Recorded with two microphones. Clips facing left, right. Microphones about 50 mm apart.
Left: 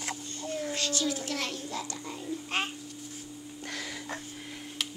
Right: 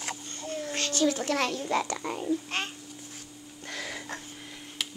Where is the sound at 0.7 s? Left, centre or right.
Right.